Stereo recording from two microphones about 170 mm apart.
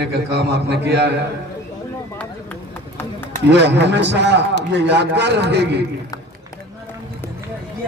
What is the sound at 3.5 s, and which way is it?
A man's voice, 90° right.